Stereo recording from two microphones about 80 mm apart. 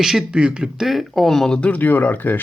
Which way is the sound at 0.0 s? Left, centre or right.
Centre.